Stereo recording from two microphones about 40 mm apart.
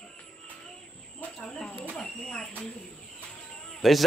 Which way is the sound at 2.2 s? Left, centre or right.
Centre.